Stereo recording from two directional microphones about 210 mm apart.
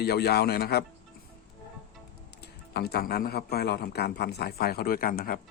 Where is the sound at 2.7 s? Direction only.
50° left (ahead or behind).